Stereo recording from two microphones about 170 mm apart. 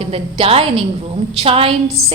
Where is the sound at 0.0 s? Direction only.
35° right (ahead or behind).